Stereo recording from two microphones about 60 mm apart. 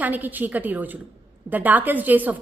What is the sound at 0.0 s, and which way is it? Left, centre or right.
A woman's voice, right.